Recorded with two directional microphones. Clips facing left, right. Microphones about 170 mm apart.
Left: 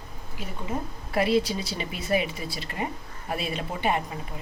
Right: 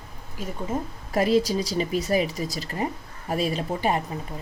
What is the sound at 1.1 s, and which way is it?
Speech, 40° right (ahead or behind).